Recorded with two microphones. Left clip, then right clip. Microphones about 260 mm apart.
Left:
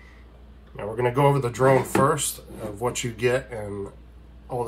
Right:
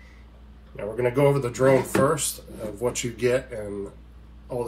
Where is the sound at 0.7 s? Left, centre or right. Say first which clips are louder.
Even; centre.